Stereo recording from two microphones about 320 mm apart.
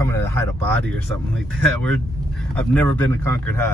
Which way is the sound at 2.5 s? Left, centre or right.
Centre.